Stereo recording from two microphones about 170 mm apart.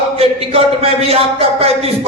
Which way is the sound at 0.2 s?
35° right (ahead or behind).